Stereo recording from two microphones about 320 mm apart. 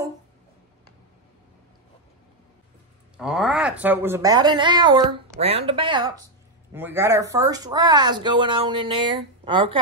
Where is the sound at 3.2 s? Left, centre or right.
Centre.